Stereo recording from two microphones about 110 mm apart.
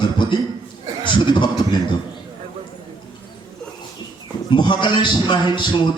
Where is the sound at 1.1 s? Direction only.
45° left (ahead or behind).